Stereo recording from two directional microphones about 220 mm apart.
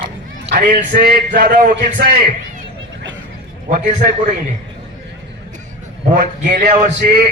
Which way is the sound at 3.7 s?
35° right (ahead or behind).